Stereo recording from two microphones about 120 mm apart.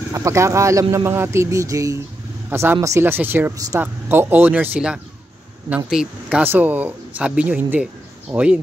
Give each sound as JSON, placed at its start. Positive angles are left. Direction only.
{"t": 0.1, "sound": "speech", "side_deg": -25}